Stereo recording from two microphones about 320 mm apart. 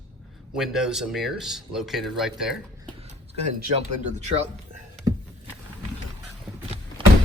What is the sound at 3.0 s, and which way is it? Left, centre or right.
Speech, right.